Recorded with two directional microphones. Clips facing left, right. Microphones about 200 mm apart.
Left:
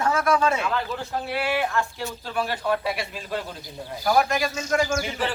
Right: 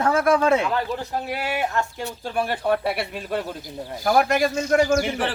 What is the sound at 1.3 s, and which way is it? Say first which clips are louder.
Speech: left 2 dB; 40° right (ahead or behind).